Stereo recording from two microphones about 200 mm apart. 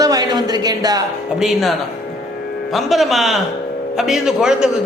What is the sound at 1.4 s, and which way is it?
A man's voice, centre (ahead or behind).